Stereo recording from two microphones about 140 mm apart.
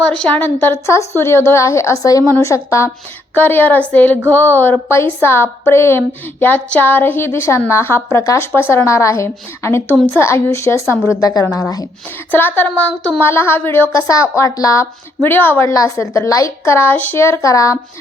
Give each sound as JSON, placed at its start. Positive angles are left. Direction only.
{"t": 0.0, "sound": "a woman's voice", "side_deg": 5}
{"t": 12.3, "sound": "speech", "side_deg": 15}